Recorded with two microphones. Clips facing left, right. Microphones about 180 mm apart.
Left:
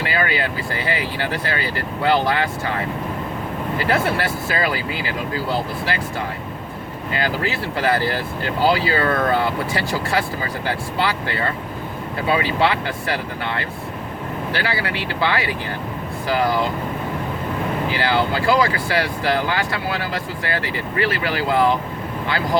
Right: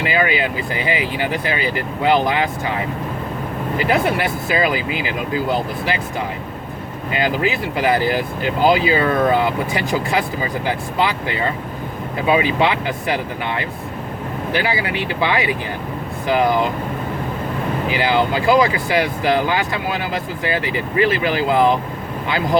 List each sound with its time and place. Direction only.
0.0 s speech: 20° right (ahead or behind)
3.8 s speech: 15° right (ahead or behind)
7.1 s speech: 20° right (ahead or behind)
17.9 s speech: 15° right (ahead or behind)